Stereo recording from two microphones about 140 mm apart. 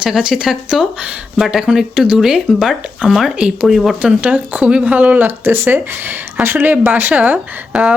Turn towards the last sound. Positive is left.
turn(degrees=-10)  # may be behind; listen again after turning